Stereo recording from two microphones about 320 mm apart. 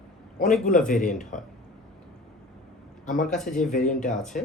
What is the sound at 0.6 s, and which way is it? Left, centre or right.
Speech, left.